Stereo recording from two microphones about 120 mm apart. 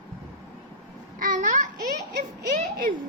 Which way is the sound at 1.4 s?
90° right.